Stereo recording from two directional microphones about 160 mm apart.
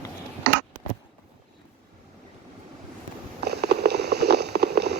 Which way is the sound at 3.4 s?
90° right.